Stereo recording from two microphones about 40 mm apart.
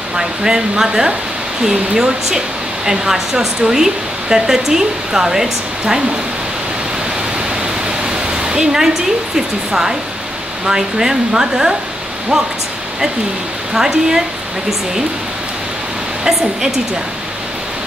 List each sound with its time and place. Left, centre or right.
0.1 s speech: centre
7.3 s pink noise: right
10.6 s speech: centre
13.7 s speech: centre